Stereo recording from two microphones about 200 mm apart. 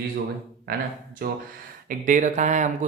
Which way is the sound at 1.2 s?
50° right (ahead or behind).